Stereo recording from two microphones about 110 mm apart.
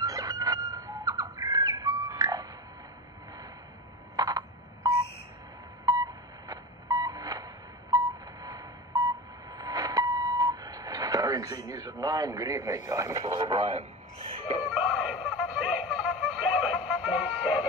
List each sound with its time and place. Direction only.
0.0 s bird: 30° right (ahead or behind)
4.2 s frog: 35° right (ahead or behind)
5.9 s radio: 35° right (ahead or behind)
11.7 s speech: 35° right (ahead or behind)
13.2 s speech: 55° right (ahead or behind)
13.6 s a man's voice: 70° right (ahead or behind)
14.7 s a sound: 10° right (ahead or behind)